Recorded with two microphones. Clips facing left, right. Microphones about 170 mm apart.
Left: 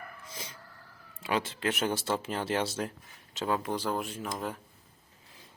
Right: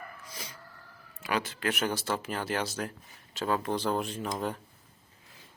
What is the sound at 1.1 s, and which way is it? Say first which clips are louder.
Speech: left 1 dB; 25° left (ahead or behind).